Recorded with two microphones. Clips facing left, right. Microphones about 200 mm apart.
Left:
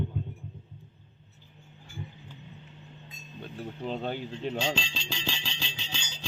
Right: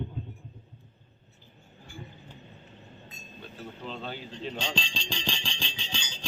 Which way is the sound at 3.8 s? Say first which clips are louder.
Left 6 dB; 50° left (ahead or behind).